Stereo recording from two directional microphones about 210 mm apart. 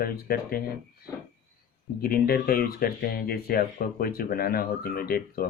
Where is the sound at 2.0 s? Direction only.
45° left (ahead or behind).